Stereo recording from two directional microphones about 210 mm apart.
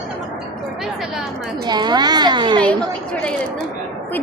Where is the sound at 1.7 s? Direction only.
20° right (ahead or behind).